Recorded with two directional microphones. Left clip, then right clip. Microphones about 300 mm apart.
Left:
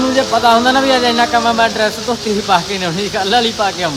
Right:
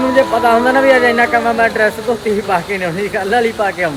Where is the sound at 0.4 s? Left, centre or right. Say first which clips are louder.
Left 1 dB; centre.